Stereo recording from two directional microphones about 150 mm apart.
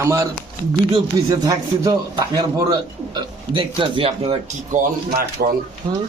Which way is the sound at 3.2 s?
35° right (ahead or behind).